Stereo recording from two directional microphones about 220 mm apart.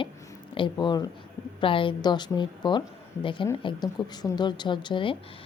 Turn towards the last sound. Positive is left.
turn(degrees=20)  # may be behind; listen again after turning